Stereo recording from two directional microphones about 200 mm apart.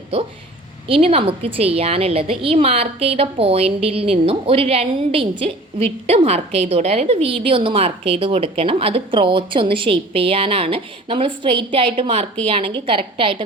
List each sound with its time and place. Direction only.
0.9 s a woman's voice: 30° right (ahead or behind)